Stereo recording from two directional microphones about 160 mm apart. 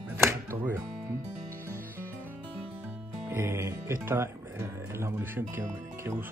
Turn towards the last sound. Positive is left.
turn(degrees=-15)  # may be behind; listen again after turning